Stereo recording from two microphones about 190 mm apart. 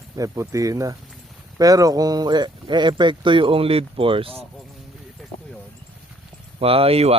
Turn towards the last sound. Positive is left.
turn(degrees=-30)  # may be behind; listen again after turning